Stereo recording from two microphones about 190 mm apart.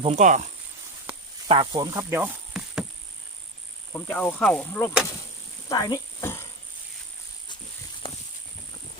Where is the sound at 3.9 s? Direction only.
5° left (ahead or behind).